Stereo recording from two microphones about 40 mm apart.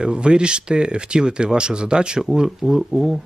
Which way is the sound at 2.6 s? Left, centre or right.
Centre.